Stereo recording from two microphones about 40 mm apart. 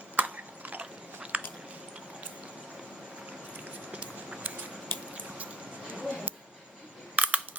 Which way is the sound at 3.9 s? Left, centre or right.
Right.